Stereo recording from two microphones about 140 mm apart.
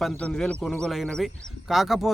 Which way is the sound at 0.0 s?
5° left (ahead or behind).